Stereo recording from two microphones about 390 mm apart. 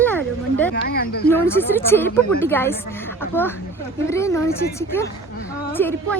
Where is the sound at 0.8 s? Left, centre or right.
Left.